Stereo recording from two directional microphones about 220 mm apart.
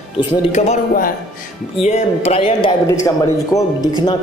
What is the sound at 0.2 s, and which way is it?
A man's voice, 30° left (ahead or behind).